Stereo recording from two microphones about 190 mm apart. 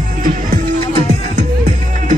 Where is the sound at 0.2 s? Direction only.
40° right (ahead or behind).